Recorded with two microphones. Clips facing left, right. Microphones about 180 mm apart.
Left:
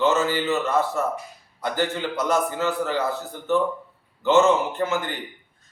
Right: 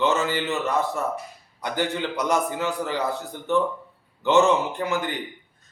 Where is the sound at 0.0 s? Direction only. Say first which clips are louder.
Left 2 dB; 15° right (ahead or behind).